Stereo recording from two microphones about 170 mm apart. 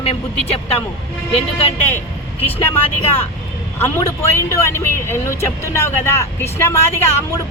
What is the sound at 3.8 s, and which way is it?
Speech, 15° left (ahead or behind).